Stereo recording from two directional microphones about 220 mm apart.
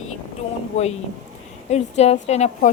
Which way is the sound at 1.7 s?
30° left (ahead or behind).